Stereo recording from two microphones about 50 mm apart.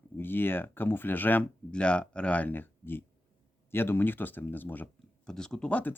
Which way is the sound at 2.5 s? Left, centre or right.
Left.